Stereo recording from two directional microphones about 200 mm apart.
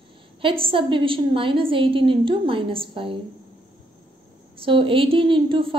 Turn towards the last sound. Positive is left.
turn(degrees=-25)  # may be behind; listen again after turning